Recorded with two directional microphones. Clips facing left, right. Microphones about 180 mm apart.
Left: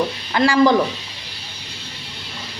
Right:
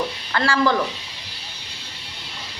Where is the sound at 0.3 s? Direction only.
15° left (ahead or behind).